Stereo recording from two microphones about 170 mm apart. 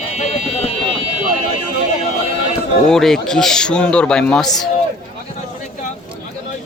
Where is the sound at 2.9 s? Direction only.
5° left (ahead or behind).